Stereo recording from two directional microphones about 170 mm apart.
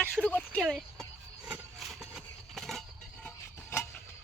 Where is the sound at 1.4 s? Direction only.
5° right (ahead or behind).